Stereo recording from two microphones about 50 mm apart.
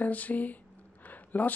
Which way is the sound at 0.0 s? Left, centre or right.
Left.